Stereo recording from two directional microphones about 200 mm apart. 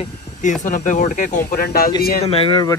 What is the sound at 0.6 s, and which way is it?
Speech, 40° left (ahead or behind).